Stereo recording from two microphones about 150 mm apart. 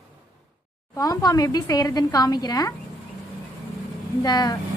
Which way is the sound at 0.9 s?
25° left (ahead or behind).